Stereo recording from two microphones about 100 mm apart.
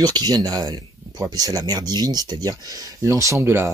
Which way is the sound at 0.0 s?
40° right (ahead or behind).